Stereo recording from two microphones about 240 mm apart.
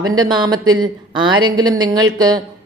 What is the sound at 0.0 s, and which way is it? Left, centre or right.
Speech, centre.